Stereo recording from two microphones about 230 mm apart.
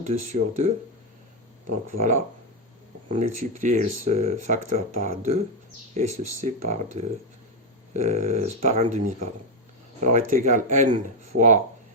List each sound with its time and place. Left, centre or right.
0.0 s speech: right
1.9 s speech: right
10.0 s speech: right